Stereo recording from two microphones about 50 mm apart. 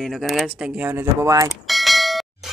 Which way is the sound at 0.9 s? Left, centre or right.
Right.